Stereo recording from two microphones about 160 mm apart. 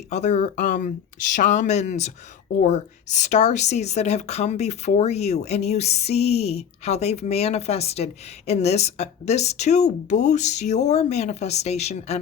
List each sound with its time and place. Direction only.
0.1 s a woman's voice: 45° left (ahead or behind)